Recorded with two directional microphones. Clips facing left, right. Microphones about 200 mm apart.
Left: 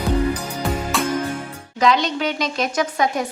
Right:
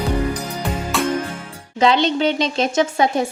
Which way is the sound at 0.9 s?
Centre (ahead or behind).